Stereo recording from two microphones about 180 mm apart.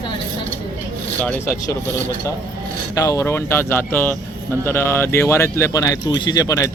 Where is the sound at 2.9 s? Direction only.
15° left (ahead or behind).